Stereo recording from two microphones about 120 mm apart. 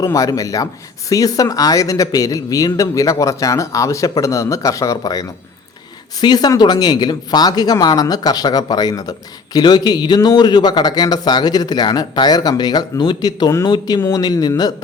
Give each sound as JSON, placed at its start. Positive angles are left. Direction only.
{"t": 0.0, "sound": "speech", "side_deg": 30}